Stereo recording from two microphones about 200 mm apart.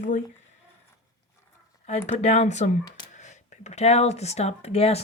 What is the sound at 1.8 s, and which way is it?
Speech, 35° left (ahead or behind).